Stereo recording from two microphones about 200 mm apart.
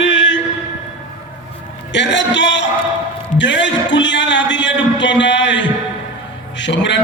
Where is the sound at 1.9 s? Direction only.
60° left (ahead or behind).